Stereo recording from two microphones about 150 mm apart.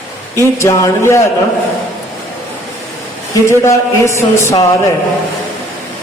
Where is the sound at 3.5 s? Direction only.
20° left (ahead or behind).